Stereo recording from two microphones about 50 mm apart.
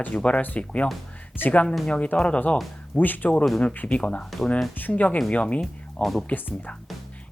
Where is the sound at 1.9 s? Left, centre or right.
Left.